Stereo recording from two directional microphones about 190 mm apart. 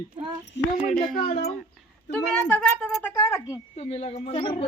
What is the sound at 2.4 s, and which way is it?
Speech, 10° left (ahead or behind).